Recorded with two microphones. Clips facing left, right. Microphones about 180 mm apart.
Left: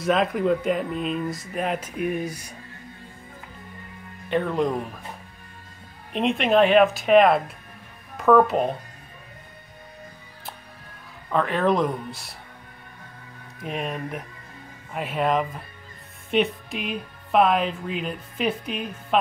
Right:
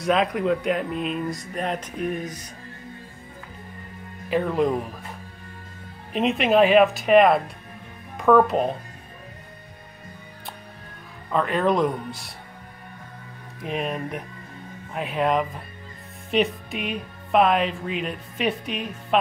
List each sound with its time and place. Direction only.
0.0 s speech: centre (ahead or behind)
4.3 s speech: centre (ahead or behind)
6.1 s speech: centre (ahead or behind)
11.2 s speech: centre (ahead or behind)
13.6 s speech: centre (ahead or behind)